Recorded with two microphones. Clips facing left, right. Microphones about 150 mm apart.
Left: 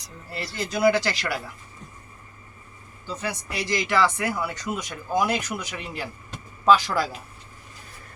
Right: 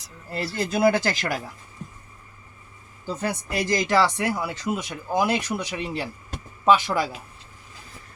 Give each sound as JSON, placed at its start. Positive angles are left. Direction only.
{"t": 0.3, "sound": "speech", "side_deg": -50}
{"t": 3.2, "sound": "speech", "side_deg": -50}